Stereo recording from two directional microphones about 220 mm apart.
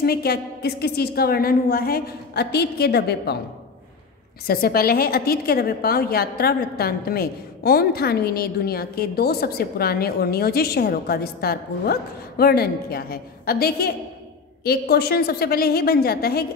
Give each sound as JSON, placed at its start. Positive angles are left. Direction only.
{"t": 0.0, "sound": "a woman's voice", "side_deg": 45}
{"t": 4.5, "sound": "a woman's voice", "side_deg": 45}